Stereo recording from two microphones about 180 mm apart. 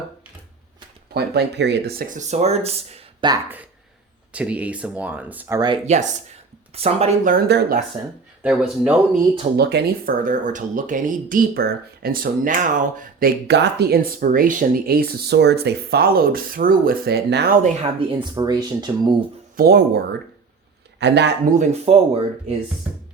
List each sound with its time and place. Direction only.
1.1 s speech: 65° right (ahead or behind); by 3.2 s 35° right (ahead or behind)
4.3 s speech: 5° right (ahead or behind)
5.5 s speech: 25° right (ahead or behind)
5.8 s speech: 40° right (ahead or behind)
7.3 s speech: 60° right (ahead or behind)
8.4 s speech: 5° right (ahead or behind)
9.6 s speech: 65° right (ahead or behind)
10.2 s speech: 45° right (ahead or behind); by 17.6 s 65° right (ahead or behind)
18.0 s speech: 25° right (ahead or behind)
19.5 s speech: 65° right (ahead or behind)
21.0 s speech: 70° right (ahead or behind)
21.5 s speech: 40° right (ahead or behind)
22.9 s speech: 5° right (ahead or behind)